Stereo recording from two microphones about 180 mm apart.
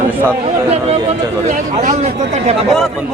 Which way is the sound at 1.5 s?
40° right (ahead or behind).